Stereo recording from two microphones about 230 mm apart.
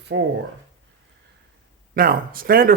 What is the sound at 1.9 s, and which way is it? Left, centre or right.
Speech, right.